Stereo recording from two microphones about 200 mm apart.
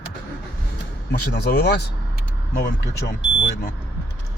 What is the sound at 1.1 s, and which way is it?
Speech, 55° left (ahead or behind).